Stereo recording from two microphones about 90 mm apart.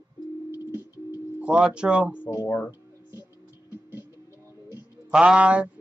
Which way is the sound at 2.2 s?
25° left (ahead or behind).